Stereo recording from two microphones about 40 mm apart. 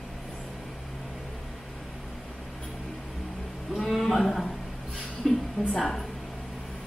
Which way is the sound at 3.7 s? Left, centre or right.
Centre.